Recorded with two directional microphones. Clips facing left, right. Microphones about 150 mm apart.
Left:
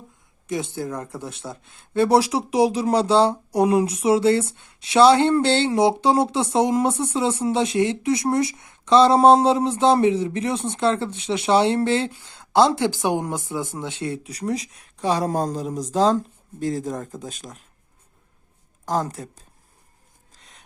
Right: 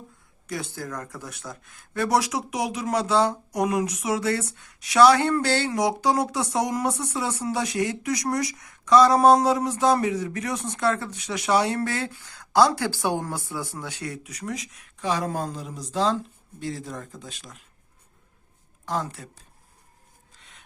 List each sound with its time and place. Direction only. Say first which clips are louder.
0.4 s speech: left 6 dB; 20° left (ahead or behind); by 17.6 s 45° left (ahead or behind)
18.9 s speech: left 5 dB; 40° left (ahead or behind)
20.3 s filing: left 3 dB; 40° left (ahead or behind)